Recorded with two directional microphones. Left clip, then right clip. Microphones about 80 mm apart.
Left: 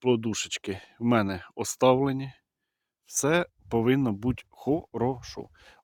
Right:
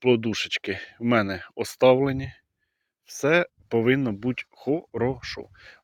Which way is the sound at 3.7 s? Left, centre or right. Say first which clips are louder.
Right 3 dB; left.